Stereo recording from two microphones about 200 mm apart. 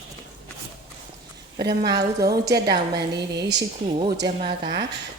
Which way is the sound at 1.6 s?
55° right (ahead or behind).